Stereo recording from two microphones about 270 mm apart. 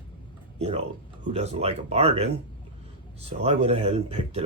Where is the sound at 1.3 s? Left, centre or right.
Right.